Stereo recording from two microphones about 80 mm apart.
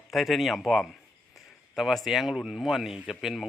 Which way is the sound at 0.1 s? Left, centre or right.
Centre.